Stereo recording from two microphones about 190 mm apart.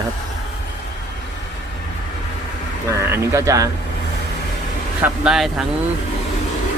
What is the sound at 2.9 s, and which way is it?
Speech, 15° right (ahead or behind).